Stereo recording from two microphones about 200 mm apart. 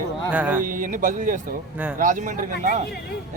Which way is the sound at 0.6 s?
40° right (ahead or behind).